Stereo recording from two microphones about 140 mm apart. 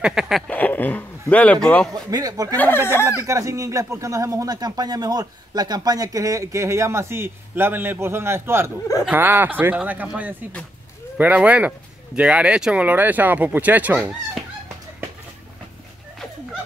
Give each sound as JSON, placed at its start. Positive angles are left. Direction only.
{"t": 0.0, "sound": "speech", "side_deg": -5}
{"t": 0.5, "sound": "a sound", "side_deg": 10}
{"t": 1.3, "sound": "speech", "side_deg": 10}
{"t": 2.0, "sound": "speech", "side_deg": -25}
{"t": 2.5, "sound": "speech", "side_deg": 15}
{"t": 3.3, "sound": "speech", "side_deg": -20}